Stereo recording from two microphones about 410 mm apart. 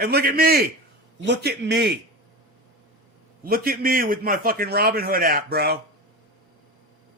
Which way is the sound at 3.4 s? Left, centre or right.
Right.